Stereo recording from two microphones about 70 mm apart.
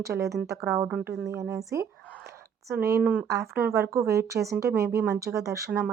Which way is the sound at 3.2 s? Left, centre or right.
Right.